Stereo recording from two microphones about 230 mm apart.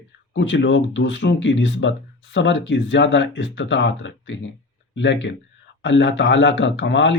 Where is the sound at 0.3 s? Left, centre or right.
Left.